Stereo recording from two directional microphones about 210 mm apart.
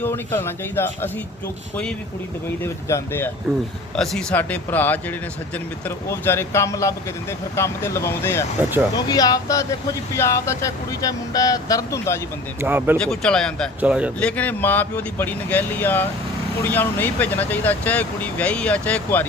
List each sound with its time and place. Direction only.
0.0 s speech: 10° left (ahead or behind)
2.9 s speech: 10° left (ahead or behind)
12.5 s speech: 10° right (ahead or behind)
13.0 s speech: 5° left (ahead or behind)
14.2 s speech: 5° left (ahead or behind)